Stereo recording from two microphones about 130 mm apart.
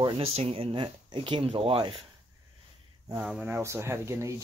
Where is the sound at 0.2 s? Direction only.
50° right (ahead or behind).